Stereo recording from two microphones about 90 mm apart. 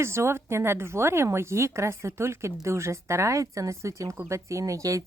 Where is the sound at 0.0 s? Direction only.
30° right (ahead or behind).